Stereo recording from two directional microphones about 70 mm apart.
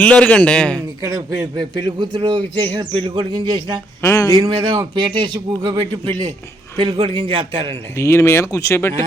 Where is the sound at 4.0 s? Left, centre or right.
Left.